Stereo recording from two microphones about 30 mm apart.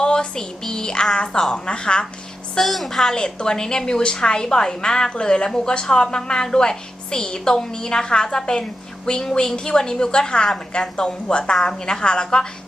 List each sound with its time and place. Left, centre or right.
0.0 s a sound: left
0.6 s child singing: left
1.1 s a woman's voice: left
2.6 s a woman's voice: centre
3.2 s a woman's voice: left